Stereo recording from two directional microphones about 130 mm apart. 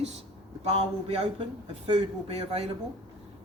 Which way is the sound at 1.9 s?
50° right (ahead or behind).